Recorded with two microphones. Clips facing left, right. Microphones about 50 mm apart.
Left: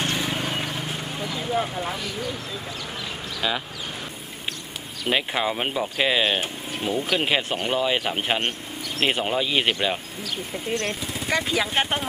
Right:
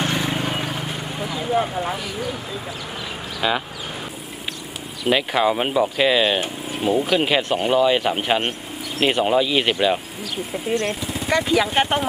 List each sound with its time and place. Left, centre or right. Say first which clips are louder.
0.0 s a sound: right 3 dB; centre
3.3 s speech: right 5 dB; centre
5.0 s speech: right 5 dB; centre